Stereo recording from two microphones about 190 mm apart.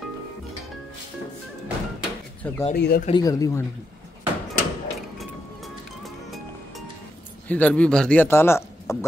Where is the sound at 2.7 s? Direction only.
55° left (ahead or behind).